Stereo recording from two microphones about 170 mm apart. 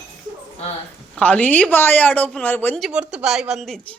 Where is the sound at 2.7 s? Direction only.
5° right (ahead or behind).